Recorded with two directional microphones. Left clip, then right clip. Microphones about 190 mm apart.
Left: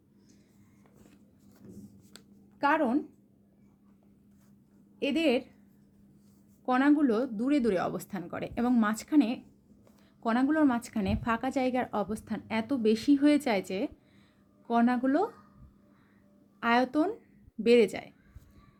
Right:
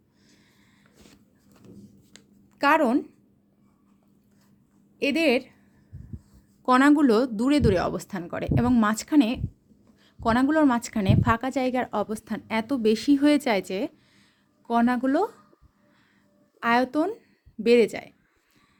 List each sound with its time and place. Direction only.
2.6 s speech: 45° right (ahead or behind)
4.9 s a woman's voice: 30° right (ahead or behind)
6.7 s a woman's voice: 40° right (ahead or behind)
16.6 s a woman's voice: 25° right (ahead or behind)